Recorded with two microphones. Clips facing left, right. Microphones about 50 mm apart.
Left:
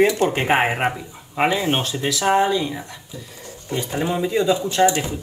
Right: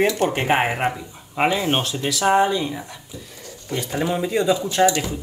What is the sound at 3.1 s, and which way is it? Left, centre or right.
Speech, left.